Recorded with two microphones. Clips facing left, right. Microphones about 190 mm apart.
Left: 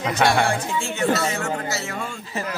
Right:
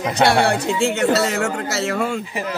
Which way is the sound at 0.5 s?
80° right.